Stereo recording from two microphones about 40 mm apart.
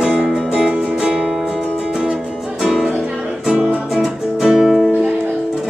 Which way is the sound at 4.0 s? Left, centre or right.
Centre.